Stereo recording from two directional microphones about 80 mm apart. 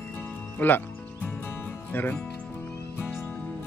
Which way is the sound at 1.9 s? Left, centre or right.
Left.